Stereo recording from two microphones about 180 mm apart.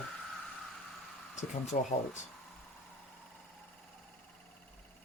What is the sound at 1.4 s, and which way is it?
Speech, 40° left (ahead or behind).